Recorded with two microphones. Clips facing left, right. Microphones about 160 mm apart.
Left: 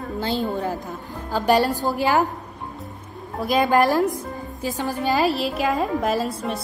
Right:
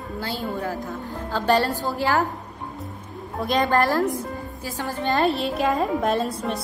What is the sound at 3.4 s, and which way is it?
A woman's voice, 5° left (ahead or behind).